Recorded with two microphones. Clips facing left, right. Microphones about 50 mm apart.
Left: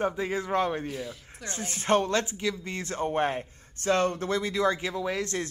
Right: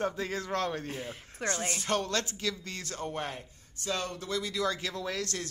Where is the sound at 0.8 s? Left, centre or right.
Right.